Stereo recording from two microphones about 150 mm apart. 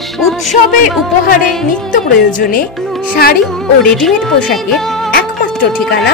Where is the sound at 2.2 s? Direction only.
65° left (ahead or behind).